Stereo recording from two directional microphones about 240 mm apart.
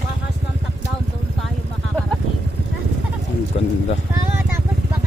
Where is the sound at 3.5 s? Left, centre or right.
Left.